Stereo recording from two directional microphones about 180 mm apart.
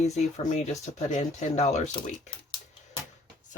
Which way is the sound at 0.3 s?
40° left (ahead or behind).